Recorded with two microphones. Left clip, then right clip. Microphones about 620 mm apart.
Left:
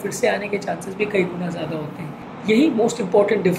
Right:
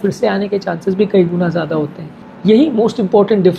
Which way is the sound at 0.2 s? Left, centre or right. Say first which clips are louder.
Right 2 dB; right.